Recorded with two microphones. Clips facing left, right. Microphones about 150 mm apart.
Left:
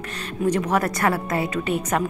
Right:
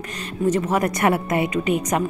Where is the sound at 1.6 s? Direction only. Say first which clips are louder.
Right 2 dB; 5° right (ahead or behind).